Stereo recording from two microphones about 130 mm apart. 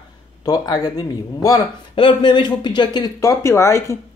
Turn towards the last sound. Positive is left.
turn(degrees=20)  # may be behind; listen again after turning